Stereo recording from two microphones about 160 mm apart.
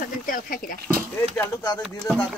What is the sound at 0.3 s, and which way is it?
Speech, 60° left (ahead or behind).